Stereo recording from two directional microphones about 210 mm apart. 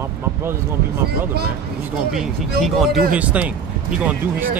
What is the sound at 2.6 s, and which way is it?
Speech, centre (ahead or behind).